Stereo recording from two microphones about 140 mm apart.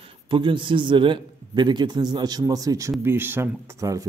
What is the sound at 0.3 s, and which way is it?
A man's voice, 35° right (ahead or behind).